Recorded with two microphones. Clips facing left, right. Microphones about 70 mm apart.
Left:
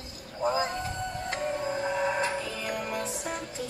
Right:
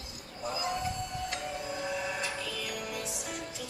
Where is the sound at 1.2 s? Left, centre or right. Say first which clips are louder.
Left 6 dB; left.